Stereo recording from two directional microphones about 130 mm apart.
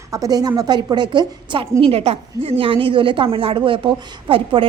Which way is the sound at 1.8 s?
45° right (ahead or behind).